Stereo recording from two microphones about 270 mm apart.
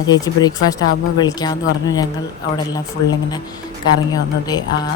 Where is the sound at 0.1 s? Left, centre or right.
Centre.